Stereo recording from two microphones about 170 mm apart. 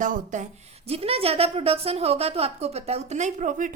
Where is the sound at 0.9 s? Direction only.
35° right (ahead or behind).